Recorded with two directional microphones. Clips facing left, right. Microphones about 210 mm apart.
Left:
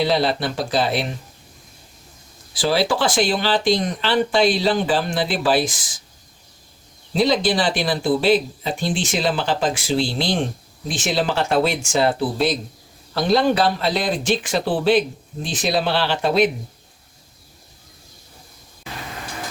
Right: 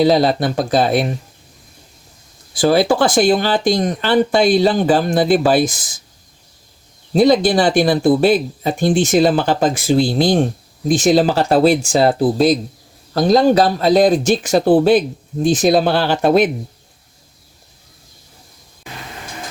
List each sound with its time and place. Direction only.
0.0 s speech: 40° right (ahead or behind)
2.5 s speech: 50° right (ahead or behind)
7.1 s speech: 45° right (ahead or behind)